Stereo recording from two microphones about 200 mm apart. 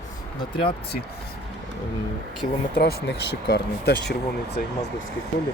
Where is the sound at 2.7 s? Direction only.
55° left (ahead or behind).